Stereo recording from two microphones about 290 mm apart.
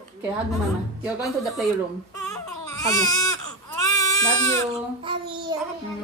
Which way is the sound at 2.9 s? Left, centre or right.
Centre.